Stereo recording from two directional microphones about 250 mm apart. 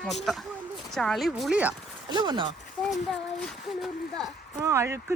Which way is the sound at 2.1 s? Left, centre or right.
Centre.